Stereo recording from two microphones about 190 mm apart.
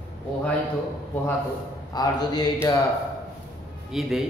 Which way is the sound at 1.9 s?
20° left (ahead or behind).